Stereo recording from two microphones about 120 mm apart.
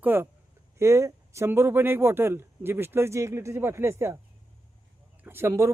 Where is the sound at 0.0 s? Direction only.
15° right (ahead or behind).